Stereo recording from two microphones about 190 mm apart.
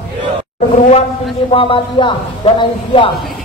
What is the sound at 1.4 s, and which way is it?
A man's voice, 30° left (ahead or behind).